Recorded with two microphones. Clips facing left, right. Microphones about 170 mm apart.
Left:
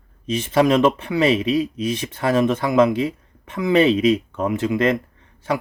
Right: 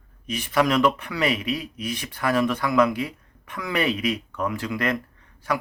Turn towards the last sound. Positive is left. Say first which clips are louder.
# left 3 dB
turn(degrees=25)  # may be behind; listen again after turning